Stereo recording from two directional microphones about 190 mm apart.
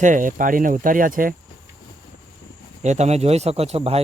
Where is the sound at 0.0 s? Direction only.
45° right (ahead or behind).